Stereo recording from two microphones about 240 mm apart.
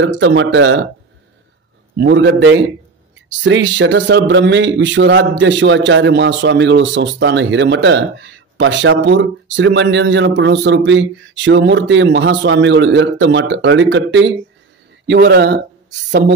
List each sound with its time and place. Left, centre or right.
0.0 s speech: right
2.0 s speech: right